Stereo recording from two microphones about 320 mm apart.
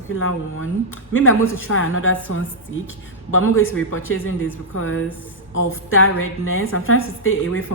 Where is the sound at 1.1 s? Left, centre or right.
Left.